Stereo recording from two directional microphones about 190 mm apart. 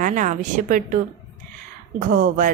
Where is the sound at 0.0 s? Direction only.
40° right (ahead or behind).